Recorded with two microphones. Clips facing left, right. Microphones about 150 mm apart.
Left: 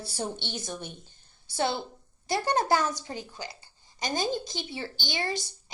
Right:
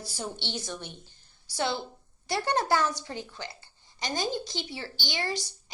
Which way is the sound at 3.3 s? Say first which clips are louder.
Left 1 dB; 15° left (ahead or behind).